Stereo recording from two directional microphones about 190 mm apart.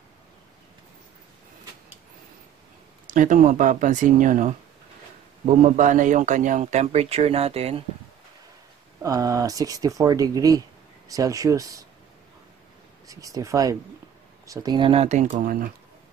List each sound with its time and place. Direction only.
3.1 s a man's voice: 40° right (ahead or behind)
9.0 s speech: 20° right (ahead or behind)
13.0 s a man's voice: 20° right (ahead or behind); by 15.7 s 50° right (ahead or behind)